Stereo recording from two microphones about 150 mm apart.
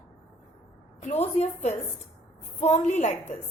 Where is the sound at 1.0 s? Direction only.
45° left (ahead or behind).